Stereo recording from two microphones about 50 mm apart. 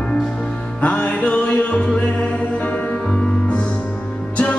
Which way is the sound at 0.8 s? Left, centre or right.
Left.